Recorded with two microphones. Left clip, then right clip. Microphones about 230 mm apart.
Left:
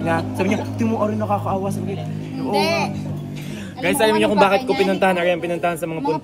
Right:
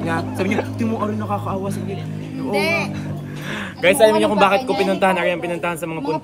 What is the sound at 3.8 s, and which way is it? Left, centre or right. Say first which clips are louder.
Speech: right 4 dB; centre.